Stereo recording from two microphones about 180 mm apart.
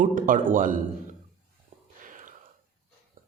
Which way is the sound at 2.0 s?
45° right (ahead or behind).